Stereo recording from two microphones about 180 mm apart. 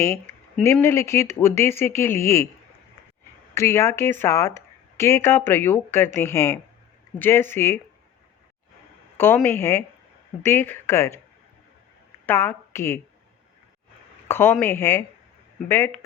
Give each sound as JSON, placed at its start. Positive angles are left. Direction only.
{"t": 0.0, "sound": "speech", "side_deg": 15}
{"t": 3.5, "sound": "speech", "side_deg": 15}
{"t": 9.1, "sound": "speech", "side_deg": 10}
{"t": 12.2, "sound": "a woman's voice", "side_deg": 10}
{"t": 14.3, "sound": "speech", "side_deg": 10}